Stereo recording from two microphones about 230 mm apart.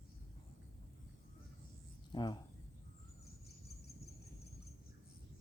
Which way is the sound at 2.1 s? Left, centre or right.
Centre.